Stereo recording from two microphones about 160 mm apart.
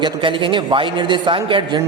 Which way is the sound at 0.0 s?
30° right (ahead or behind).